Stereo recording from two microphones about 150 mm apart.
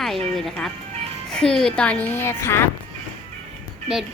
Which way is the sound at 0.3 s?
5° left (ahead or behind).